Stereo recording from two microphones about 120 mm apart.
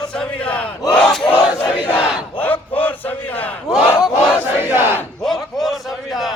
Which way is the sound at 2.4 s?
15° left (ahead or behind).